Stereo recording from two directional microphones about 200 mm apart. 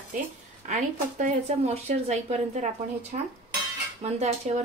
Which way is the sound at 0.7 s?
40° right (ahead or behind).